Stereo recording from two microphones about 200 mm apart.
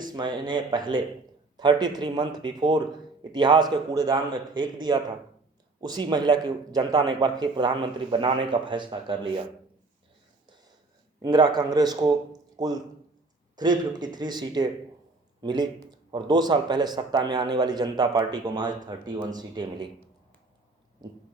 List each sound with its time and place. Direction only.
0.1 s a man's voice: 20° right (ahead or behind)
11.2 s a man's voice: 20° right (ahead or behind)
21.0 s a man's voice: 20° right (ahead or behind)